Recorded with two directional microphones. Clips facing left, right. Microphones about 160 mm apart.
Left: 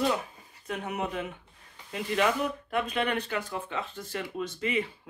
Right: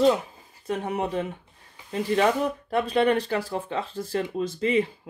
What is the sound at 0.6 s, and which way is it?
Speech, 35° right (ahead or behind).